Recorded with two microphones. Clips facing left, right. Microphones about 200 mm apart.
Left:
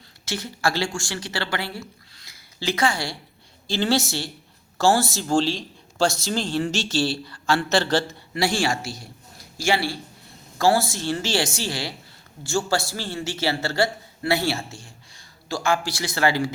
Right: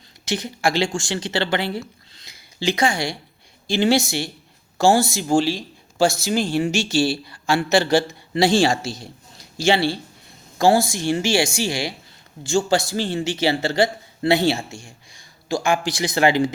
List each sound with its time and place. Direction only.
0.3 s a man's voice: 15° right (ahead or behind)
8.3 s a man's voice: 25° right (ahead or behind)